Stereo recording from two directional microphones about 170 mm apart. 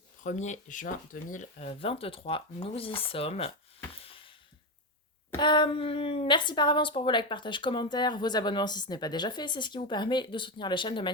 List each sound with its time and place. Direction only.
0.2 s speech: 45° left (ahead or behind)
3.9 s a sound: 30° left (ahead or behind)
5.4 s a woman's voice: 25° left (ahead or behind)